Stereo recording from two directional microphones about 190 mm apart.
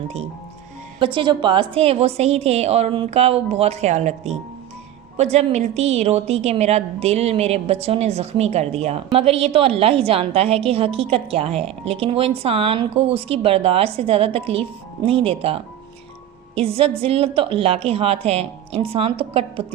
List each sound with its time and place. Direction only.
0.9 s a woman's voice: 25° right (ahead or behind)